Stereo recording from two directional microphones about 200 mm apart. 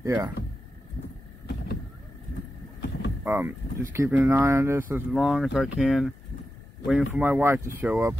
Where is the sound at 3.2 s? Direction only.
10° right (ahead or behind).